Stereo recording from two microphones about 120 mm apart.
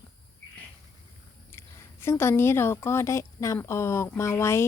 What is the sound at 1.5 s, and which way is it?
A woman's voice, 20° left (ahead or behind).